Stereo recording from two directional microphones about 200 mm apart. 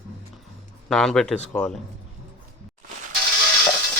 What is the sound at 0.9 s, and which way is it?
Speech, centre (ahead or behind).